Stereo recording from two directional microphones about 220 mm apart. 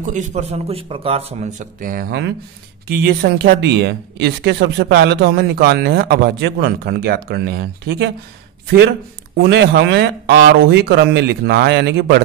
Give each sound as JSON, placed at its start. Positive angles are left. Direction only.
{"t": 0.0, "sound": "a man's voice", "side_deg": -35}
{"t": 9.4, "sound": "speech", "side_deg": -45}